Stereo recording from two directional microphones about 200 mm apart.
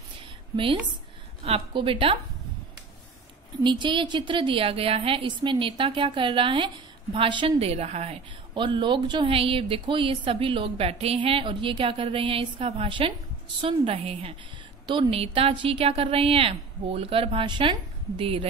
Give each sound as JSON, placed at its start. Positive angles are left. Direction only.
{"t": 1.4, "sound": "a woman's voice", "side_deg": -25}
{"t": 3.6, "sound": "a woman's voice", "side_deg": -25}